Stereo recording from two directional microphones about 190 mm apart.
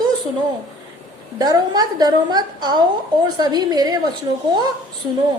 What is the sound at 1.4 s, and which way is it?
A woman's voice, 20° right (ahead or behind).